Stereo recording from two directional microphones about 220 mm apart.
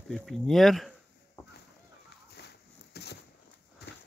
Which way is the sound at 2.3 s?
50° left (ahead or behind).